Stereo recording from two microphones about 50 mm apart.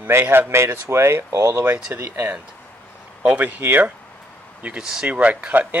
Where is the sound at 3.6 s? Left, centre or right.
Right.